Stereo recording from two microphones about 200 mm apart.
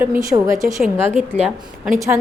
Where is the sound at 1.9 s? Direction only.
15° right (ahead or behind).